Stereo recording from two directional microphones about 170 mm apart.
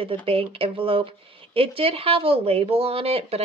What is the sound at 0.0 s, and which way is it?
Speech, 30° right (ahead or behind).